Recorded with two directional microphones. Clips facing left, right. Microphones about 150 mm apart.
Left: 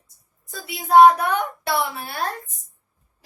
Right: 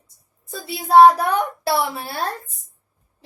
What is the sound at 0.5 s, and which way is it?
A child's voice, 30° right (ahead or behind).